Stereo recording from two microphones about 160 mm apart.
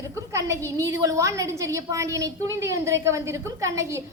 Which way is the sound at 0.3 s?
15° right (ahead or behind).